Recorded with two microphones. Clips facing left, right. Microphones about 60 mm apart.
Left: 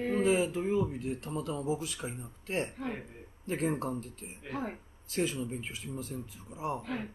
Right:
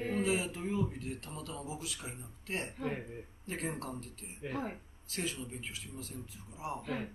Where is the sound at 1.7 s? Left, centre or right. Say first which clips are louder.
Left 4 dB; centre.